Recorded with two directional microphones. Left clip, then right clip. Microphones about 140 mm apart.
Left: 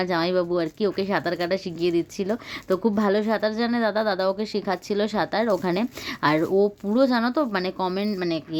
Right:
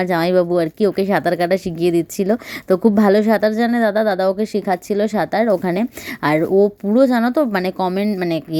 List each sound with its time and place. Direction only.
0.0 s a woman's voice: 35° right (ahead or behind)